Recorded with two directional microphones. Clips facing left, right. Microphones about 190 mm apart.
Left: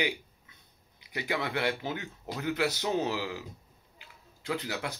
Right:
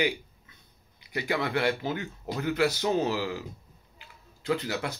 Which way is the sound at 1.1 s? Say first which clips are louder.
Right 4 dB; 15° left (ahead or behind).